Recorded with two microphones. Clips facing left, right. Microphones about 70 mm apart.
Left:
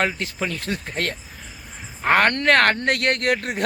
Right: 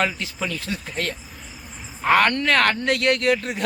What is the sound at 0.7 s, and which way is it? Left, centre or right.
Speech, left.